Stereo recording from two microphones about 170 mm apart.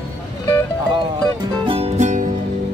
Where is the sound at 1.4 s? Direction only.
35° right (ahead or behind).